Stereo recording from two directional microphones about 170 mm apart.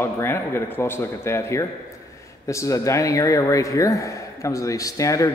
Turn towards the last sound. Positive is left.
turn(degrees=20)  # may be behind; listen again after turning